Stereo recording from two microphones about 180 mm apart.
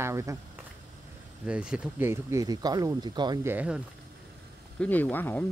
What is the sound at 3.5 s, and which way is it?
Speech, 10° right (ahead or behind).